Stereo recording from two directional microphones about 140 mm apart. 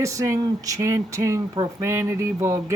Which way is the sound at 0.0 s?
20° right (ahead or behind).